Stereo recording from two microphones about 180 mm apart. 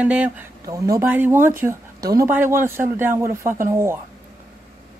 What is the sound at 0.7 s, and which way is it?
Speech, 15° right (ahead or behind).